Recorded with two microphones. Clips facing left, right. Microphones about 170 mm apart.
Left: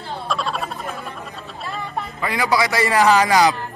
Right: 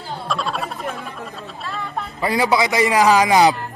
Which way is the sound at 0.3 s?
Centre (ahead or behind).